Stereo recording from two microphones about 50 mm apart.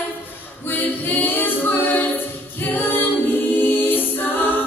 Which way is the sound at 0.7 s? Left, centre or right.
Left.